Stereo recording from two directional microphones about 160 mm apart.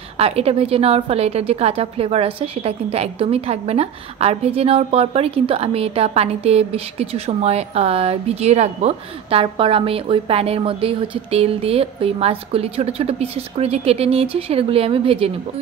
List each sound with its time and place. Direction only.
0.2 s a woman's voice: 40° right (ahead or behind)